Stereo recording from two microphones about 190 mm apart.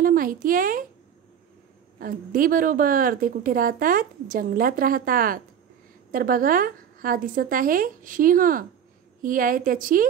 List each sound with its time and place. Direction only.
0.0 s a woman's voice: 45° right (ahead or behind)
2.0 s a woman's voice: 45° right (ahead or behind)